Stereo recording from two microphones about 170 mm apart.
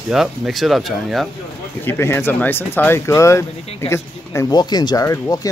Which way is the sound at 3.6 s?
35° left (ahead or behind).